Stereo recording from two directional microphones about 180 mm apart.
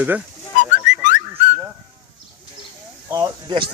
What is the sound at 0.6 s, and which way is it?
Whistling, 45° left (ahead or behind).